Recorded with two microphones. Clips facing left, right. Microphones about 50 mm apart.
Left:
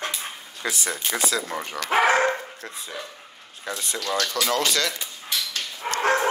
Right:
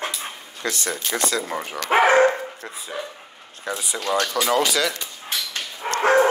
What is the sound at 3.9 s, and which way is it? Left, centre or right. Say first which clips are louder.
Speech: right 4 dB; right.